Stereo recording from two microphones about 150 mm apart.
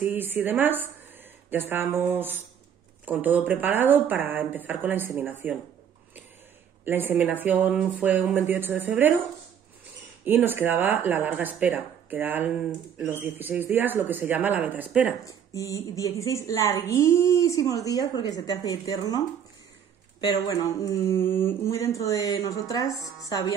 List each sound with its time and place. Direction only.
0.0 s speech: 15° right (ahead or behind)
6.8 s speech: 15° right (ahead or behind)
10.2 s speech: 15° right (ahead or behind)
15.2 s speech: 20° left (ahead or behind)